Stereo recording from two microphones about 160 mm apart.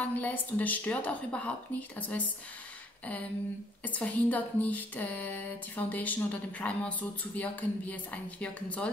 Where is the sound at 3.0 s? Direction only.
10° left (ahead or behind).